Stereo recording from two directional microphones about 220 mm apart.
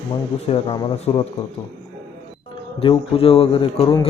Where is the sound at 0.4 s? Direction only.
25° left (ahead or behind).